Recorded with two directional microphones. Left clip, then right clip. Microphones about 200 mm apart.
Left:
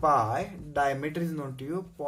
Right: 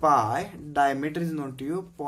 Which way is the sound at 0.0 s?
45° right (ahead or behind).